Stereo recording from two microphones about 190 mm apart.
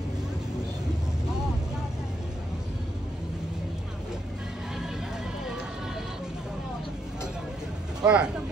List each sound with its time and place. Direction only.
8.0 s speech: 5° right (ahead or behind)